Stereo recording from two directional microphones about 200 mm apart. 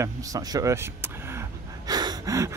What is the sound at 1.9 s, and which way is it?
Gasp, 20° right (ahead or behind).